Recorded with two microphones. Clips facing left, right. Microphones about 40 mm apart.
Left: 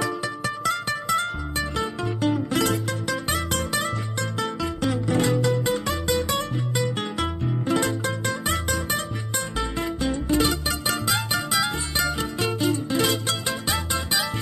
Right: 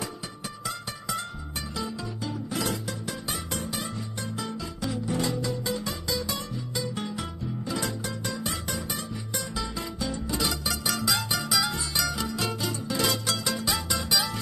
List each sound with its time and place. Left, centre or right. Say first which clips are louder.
0.7 s music: left 9 dB; left